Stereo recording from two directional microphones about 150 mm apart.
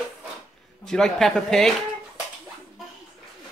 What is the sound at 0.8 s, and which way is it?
Speech, 5° left (ahead or behind).